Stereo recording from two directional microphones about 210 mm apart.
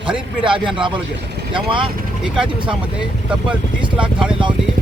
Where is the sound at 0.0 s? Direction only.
25° right (ahead or behind).